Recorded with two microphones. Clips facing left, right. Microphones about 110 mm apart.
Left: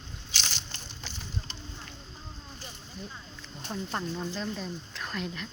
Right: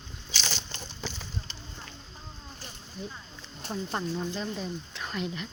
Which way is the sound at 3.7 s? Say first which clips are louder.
Right 2 dB; 5° right (ahead or behind).